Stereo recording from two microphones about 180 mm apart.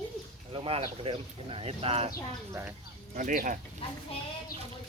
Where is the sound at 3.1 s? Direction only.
50° right (ahead or behind).